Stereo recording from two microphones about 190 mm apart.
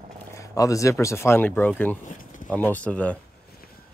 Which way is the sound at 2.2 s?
45° left (ahead or behind).